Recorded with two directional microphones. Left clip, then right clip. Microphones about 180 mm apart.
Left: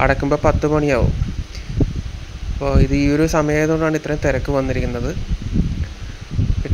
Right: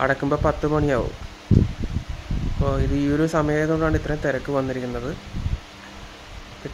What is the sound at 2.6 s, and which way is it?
Speech, 15° left (ahead or behind).